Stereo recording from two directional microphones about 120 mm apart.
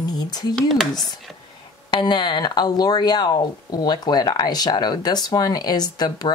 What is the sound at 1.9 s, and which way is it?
Speech, 35° left (ahead or behind).